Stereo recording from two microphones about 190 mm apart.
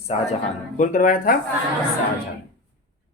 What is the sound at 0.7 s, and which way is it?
Speech, 40° left (ahead or behind).